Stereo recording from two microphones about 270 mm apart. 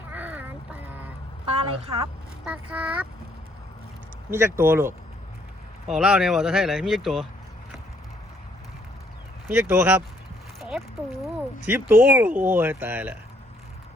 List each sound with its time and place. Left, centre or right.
0.1 s a sound: centre
1.5 s a woman's voice: centre
2.4 s speech: centre
4.3 s speech: centre
9.5 s speech: centre
10.6 s a sound: centre
11.6 s speech: centre